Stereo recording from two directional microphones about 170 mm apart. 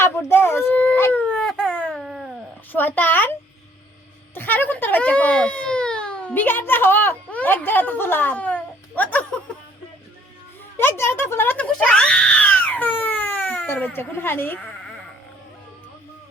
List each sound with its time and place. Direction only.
0.0 s baby cry: 15° left (ahead or behind); by 2.4 s 5° right (ahead or behind)
2.7 s a sound: 10° left (ahead or behind)
4.4 s a child's voice: 10° left (ahead or behind)
10.8 s screaming: 15° left (ahead or behind)